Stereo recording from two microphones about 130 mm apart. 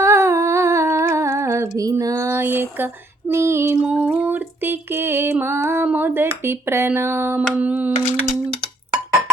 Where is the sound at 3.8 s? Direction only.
10° right (ahead or behind).